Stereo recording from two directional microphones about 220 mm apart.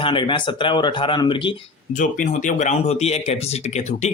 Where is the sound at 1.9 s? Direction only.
35° left (ahead or behind).